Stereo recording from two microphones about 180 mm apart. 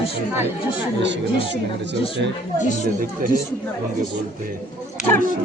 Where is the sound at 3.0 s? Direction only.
50° right (ahead or behind).